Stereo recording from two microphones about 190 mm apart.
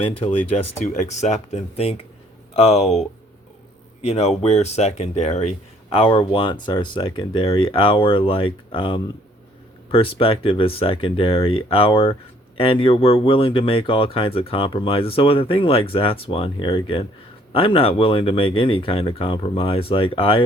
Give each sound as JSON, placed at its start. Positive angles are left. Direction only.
{"t": 0.0, "sound": "speech", "side_deg": 35}